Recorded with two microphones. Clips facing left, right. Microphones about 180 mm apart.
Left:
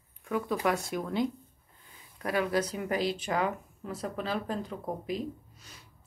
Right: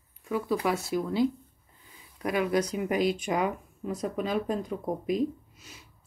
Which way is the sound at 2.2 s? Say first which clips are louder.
Right 2 dB; 15° right (ahead or behind).